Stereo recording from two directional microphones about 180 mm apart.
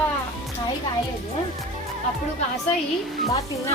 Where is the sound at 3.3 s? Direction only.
15° left (ahead or behind).